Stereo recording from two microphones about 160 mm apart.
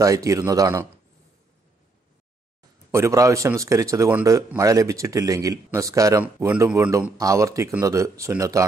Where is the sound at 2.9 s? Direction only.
20° right (ahead or behind).